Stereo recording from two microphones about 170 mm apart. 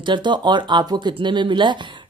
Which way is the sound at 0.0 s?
25° right (ahead or behind).